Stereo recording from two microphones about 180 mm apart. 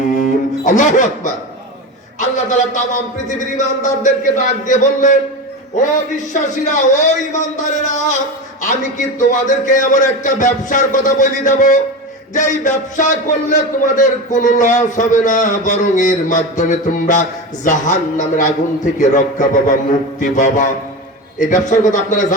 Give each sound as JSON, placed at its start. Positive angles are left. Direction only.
{"t": 0.2, "sound": "music", "side_deg": 45}
{"t": 2.1, "sound": "a man's voice", "side_deg": 45}
{"t": 6.3, "sound": "a man's voice", "side_deg": 45}